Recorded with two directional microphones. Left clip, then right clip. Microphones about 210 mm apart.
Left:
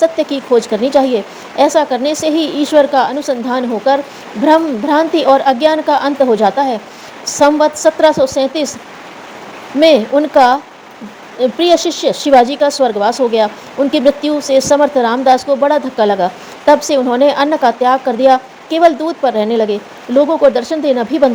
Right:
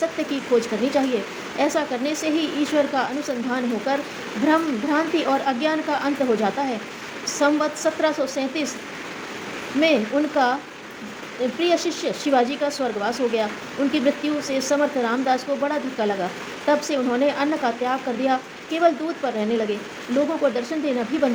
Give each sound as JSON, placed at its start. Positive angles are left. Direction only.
{"t": 0.0, "sound": "speech", "side_deg": 35}
{"t": 9.8, "sound": "speech", "side_deg": 40}
{"t": 11.6, "sound": "speech", "side_deg": 35}